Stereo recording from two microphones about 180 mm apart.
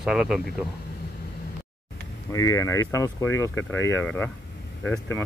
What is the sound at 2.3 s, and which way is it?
Speech, 20° left (ahead or behind).